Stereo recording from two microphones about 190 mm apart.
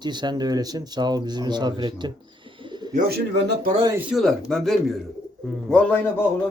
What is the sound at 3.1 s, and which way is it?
Speech, 55° right (ahead or behind).